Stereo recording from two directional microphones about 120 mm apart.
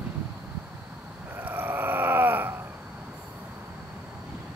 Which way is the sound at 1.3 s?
15° right (ahead or behind).